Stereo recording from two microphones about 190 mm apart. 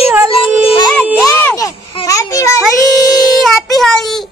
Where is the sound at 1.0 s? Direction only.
10° right (ahead or behind).